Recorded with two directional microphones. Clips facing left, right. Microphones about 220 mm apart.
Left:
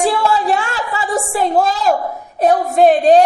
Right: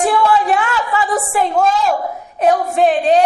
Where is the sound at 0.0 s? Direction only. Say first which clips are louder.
Right 1 dB; 30° left (ahead or behind).